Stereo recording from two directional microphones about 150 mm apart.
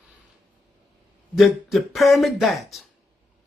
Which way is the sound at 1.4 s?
Centre (ahead or behind).